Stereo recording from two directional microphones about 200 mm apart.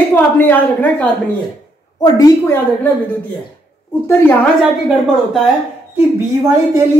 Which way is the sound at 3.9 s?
10° left (ahead or behind).